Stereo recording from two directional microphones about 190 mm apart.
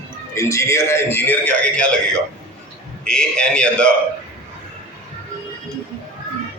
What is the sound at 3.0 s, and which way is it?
Speech, 5° left (ahead or behind).